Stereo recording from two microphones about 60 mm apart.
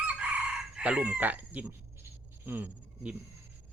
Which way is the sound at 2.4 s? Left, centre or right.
Right.